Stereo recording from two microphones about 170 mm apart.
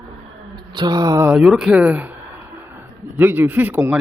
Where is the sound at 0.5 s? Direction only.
25° right (ahead or behind).